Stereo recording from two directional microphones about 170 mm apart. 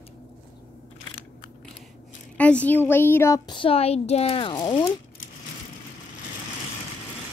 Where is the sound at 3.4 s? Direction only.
30° left (ahead or behind).